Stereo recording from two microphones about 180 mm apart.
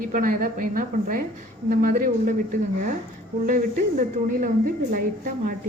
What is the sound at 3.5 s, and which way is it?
A woman's voice, 50° right (ahead or behind).